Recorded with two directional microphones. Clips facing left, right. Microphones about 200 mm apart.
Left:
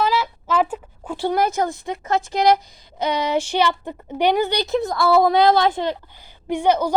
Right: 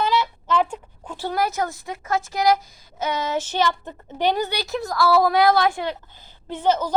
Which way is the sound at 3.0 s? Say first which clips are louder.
Left 4 dB; 15° left (ahead or behind).